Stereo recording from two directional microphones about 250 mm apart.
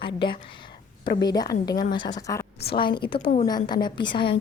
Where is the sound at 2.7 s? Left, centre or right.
Left.